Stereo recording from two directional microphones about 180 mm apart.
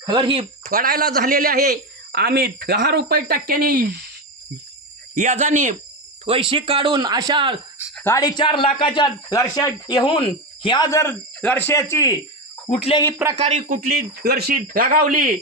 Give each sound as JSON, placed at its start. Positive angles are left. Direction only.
{"t": 0.0, "sound": "speech", "side_deg": -25}
{"t": 0.7, "sound": "a man's voice", "side_deg": -55}
{"t": 5.1, "sound": "speech", "side_deg": -45}
{"t": 6.2, "sound": "speech", "side_deg": -30}
{"t": 7.9, "sound": "speech", "side_deg": 15}
{"t": 12.6, "sound": "speech", "side_deg": 35}
{"t": 13.4, "sound": "a man's voice", "side_deg": -40}
{"t": 13.8, "sound": "speech", "side_deg": -60}